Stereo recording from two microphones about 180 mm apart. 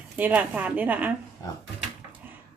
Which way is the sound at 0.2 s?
10° right (ahead or behind).